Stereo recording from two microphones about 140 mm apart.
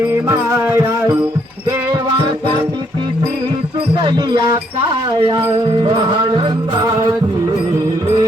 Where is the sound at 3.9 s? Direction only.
40° right (ahead or behind).